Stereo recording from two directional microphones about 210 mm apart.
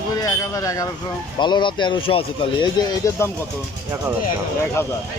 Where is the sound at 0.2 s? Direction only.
15° left (ahead or behind).